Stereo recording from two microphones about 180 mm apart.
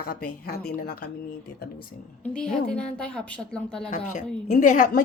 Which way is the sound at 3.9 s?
45° left (ahead or behind).